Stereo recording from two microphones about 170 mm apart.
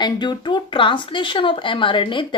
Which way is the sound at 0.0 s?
25° left (ahead or behind).